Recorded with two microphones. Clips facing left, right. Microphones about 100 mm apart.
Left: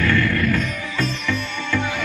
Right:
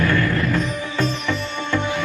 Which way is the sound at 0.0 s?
25° right (ahead or behind).